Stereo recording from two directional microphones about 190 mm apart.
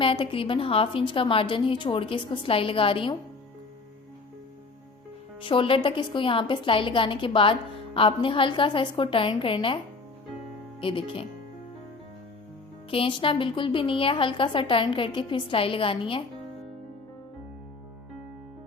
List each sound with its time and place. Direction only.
0.0 s a woman's voice: 25° left (ahead or behind)
5.4 s a woman's voice: 25° left (ahead or behind)
10.8 s a woman's voice: 25° left (ahead or behind)
12.9 s a woman's voice: 25° left (ahead or behind)